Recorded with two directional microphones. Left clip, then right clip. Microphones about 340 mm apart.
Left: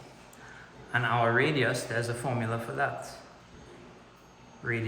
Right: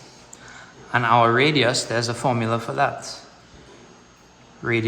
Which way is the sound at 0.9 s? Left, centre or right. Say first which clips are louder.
Right 9 dB; centre.